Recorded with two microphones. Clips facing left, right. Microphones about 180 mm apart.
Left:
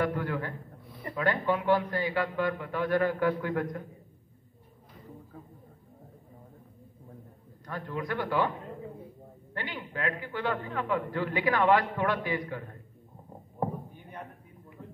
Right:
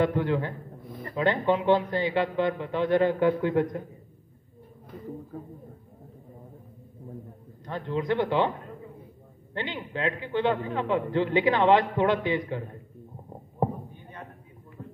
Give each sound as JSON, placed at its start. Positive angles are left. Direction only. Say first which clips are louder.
{"t": 0.0, "sound": "a man's voice", "louder": "right 5 dB", "side_deg": -25}
{"t": 7.6, "sound": "a man's voice", "louder": "right 6 dB", "side_deg": -25}
{"t": 9.5, "sound": "a man's voice", "louder": "right 5 dB", "side_deg": -25}
{"t": 14.8, "sound": "a sound", "louder": "right 4 dB", "side_deg": -10}